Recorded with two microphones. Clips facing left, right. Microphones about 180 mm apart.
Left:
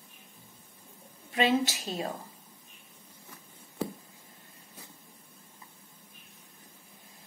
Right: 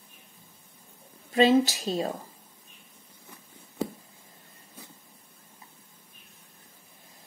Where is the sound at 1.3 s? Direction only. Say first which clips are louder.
Right 6 dB; 35° right (ahead or behind).